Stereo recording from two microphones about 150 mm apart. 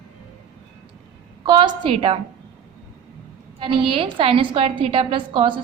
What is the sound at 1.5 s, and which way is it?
Speech, 35° right (ahead or behind).